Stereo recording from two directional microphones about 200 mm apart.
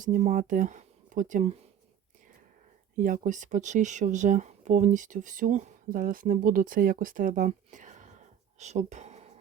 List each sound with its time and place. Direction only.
0.0 s speech: 40° right (ahead or behind)
3.0 s speech: 40° right (ahead or behind)